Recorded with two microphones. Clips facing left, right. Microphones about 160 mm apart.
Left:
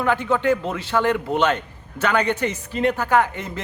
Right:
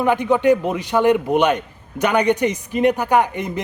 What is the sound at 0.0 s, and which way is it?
A man's voice, 15° right (ahead or behind).